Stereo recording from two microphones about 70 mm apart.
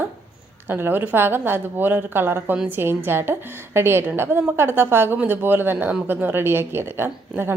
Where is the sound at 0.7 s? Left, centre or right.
Right.